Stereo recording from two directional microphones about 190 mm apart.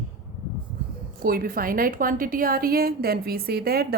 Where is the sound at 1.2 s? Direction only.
50° right (ahead or behind).